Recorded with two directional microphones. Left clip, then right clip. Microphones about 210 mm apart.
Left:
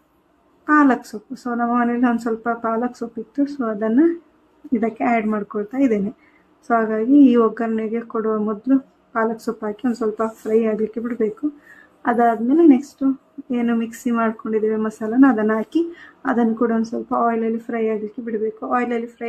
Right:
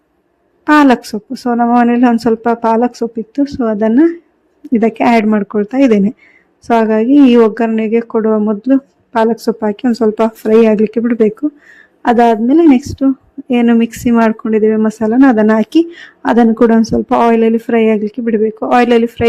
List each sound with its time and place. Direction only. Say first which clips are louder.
0.6 s speech: right 7 dB; 35° right (ahead or behind)